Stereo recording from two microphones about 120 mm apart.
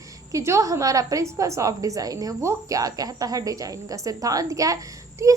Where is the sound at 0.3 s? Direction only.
25° right (ahead or behind).